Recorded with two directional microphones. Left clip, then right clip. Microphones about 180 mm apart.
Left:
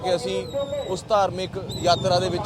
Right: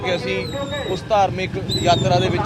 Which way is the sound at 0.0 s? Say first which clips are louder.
Right 2 dB; 30° left (ahead or behind).